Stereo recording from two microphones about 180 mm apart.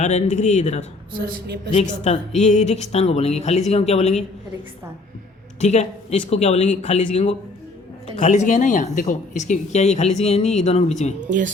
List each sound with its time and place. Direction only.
0.0 s speech: 40° left (ahead or behind)
1.2 s a woman's voice: 60° right (ahead or behind)
1.7 s speech: 35° left (ahead or behind)
5.5 s speech: 40° left (ahead or behind)
11.3 s speech: 45° right (ahead or behind)